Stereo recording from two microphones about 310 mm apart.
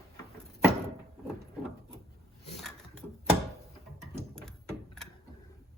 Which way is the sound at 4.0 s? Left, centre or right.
Centre.